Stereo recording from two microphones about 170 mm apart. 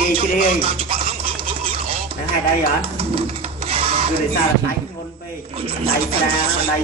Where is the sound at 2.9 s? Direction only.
35° right (ahead or behind).